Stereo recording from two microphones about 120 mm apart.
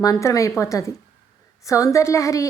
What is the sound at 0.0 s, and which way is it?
A woman's voice, 30° left (ahead or behind).